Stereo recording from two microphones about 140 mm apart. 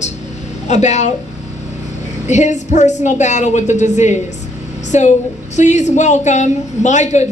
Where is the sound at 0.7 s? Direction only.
55° left (ahead or behind).